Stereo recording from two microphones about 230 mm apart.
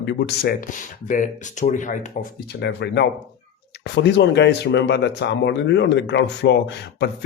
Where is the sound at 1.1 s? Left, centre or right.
Left.